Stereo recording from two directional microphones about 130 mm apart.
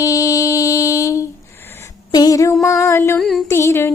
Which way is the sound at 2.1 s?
30° left (ahead or behind).